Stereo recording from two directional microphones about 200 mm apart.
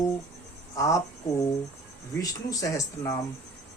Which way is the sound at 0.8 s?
15° left (ahead or behind).